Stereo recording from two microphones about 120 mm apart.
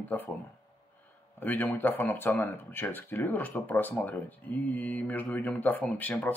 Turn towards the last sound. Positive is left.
turn(degrees=15)  # may be behind; listen again after turning